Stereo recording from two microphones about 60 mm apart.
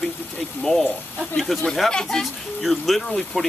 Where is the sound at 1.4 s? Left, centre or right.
Centre.